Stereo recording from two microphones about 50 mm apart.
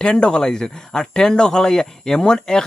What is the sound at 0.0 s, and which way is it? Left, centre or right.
Speech, centre.